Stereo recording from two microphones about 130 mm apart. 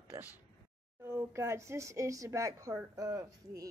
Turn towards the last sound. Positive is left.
turn(degrees=-25)  # may be behind; listen again after turning